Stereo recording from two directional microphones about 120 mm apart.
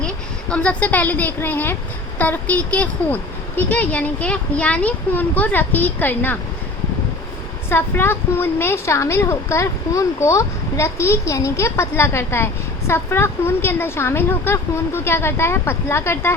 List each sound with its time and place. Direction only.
0.5 s speech: 10° left (ahead or behind)
7.7 s a woman's voice: 20° left (ahead or behind)